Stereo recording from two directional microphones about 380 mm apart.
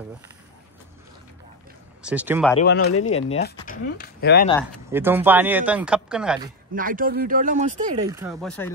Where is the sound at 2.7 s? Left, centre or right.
Left.